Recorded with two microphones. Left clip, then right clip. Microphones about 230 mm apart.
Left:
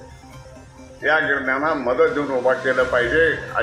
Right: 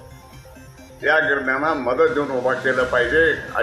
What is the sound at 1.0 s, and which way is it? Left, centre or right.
A man's voice, right.